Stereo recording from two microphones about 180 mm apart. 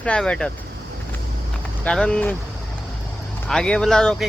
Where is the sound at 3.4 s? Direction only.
5° left (ahead or behind).